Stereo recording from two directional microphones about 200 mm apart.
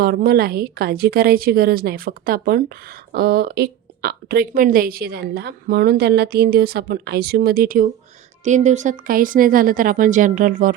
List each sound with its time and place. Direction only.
0.0 s a woman's voice: 50° right (ahead or behind)